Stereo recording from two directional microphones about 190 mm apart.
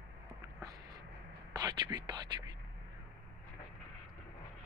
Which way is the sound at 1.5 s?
20° right (ahead or behind).